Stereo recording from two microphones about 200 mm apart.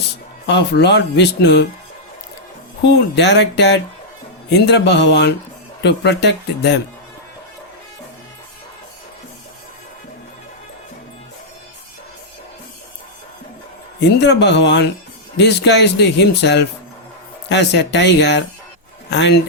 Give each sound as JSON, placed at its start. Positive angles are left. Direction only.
{"t": 0.0, "sound": "speech", "side_deg": 60}
{"t": 2.8, "sound": "speech", "side_deg": 60}
{"t": 14.0, "sound": "speech", "side_deg": 60}